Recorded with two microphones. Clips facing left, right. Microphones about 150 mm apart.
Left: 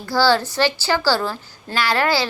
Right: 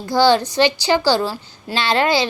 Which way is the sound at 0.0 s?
20° right (ahead or behind).